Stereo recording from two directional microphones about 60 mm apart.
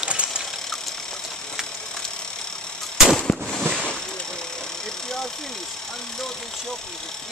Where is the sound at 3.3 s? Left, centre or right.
Centre.